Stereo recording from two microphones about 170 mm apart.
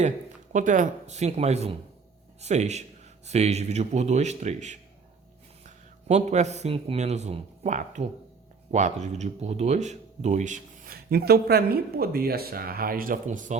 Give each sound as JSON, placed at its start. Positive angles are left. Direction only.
{"t": 0.5, "sound": "a man's voice", "side_deg": -50}